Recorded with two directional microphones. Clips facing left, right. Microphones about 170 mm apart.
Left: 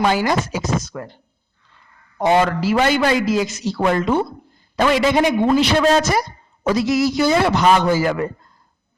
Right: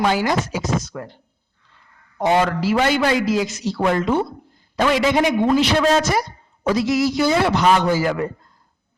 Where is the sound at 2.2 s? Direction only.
50° left (ahead or behind).